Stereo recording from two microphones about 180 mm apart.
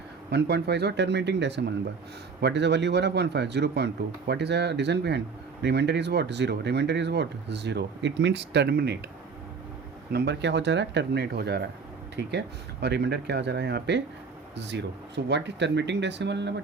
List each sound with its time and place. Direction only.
0.3 s speech: 65° right (ahead or behind)
10.1 s speech: 70° right (ahead or behind)